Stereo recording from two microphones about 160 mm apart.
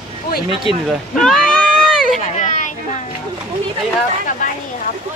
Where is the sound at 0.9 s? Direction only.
5° left (ahead or behind).